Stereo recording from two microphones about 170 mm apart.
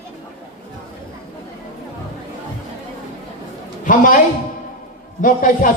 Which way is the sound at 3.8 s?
50° left (ahead or behind).